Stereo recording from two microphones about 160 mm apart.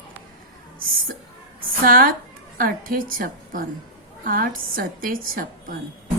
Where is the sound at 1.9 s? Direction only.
65° right (ahead or behind).